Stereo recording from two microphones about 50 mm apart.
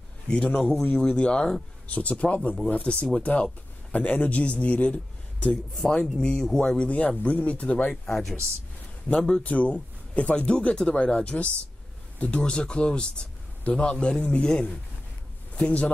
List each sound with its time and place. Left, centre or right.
0.3 s a man's voice: left
6.9 s speech: left
8.0 s speech: centre
9.4 s speech: left